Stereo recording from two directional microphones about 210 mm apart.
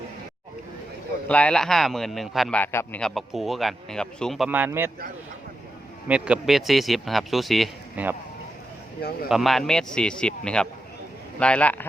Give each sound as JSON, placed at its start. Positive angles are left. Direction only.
{"t": 1.3, "sound": "a man's voice", "side_deg": 5}
{"t": 6.1, "sound": "a man's voice", "side_deg": -5}
{"t": 9.3, "sound": "a man's voice", "side_deg": 0}